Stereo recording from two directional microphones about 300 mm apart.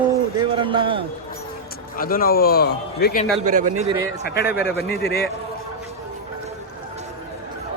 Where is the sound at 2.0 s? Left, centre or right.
Left.